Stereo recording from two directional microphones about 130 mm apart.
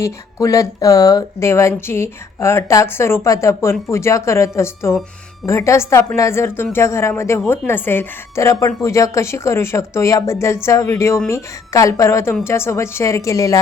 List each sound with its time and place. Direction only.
0.0 s speech: 25° left (ahead or behind)